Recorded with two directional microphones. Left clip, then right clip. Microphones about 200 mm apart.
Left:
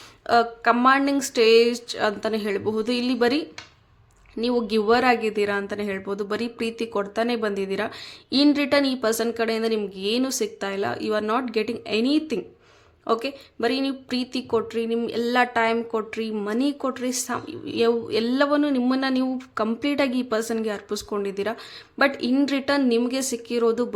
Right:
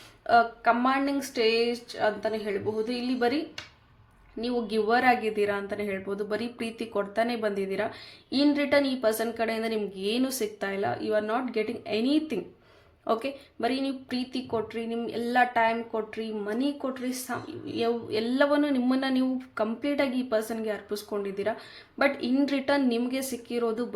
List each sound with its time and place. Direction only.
0.3 s speech: 30° left (ahead or behind)